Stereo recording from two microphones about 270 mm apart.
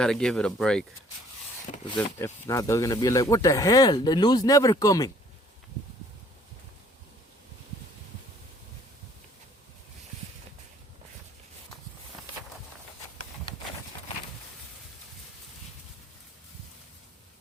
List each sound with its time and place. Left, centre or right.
0.0 s speech: centre
1.7 s speech: left
2.1 s speech: centre